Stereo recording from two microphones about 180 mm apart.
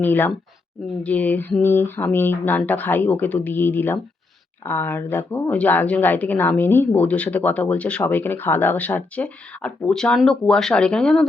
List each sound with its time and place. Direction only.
0.0 s speech: 10° left (ahead or behind)